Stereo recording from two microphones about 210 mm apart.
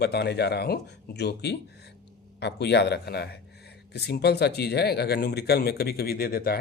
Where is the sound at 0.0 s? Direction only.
50° left (ahead or behind).